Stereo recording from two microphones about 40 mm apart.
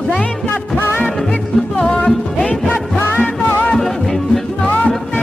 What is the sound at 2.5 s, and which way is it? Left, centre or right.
Music, left.